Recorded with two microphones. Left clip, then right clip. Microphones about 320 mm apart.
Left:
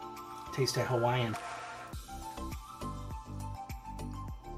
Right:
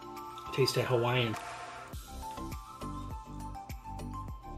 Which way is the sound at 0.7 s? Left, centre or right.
Centre.